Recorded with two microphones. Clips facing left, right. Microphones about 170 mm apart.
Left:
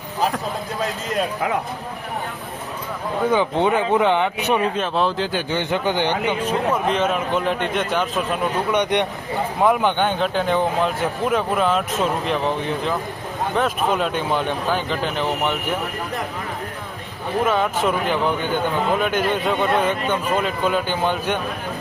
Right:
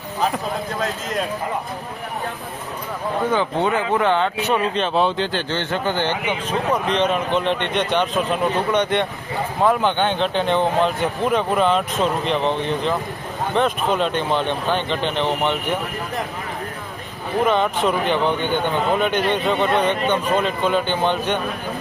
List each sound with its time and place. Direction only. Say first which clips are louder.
3.3 s speech: left 3 dB; 15° left (ahead or behind)
4.7 s speech: right 2 dB; centre (ahead or behind)
17.4 s speech: right 1 dB; 5° left (ahead or behind)